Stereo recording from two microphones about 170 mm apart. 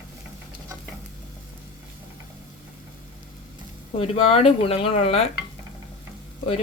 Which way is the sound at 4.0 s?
40° left (ahead or behind).